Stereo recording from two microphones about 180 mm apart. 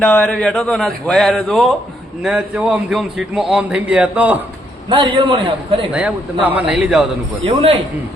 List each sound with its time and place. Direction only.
0.0 s speech: 5° left (ahead or behind)
4.9 s a man's voice: 25° right (ahead or behind)
5.9 s speech: 5° right (ahead or behind)
7.4 s speech: 35° right (ahead or behind)